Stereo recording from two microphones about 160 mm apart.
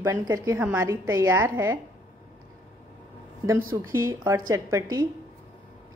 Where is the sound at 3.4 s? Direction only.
20° right (ahead or behind).